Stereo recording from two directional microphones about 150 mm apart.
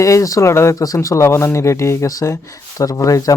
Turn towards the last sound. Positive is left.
turn(degrees=20)  # may be behind; listen again after turning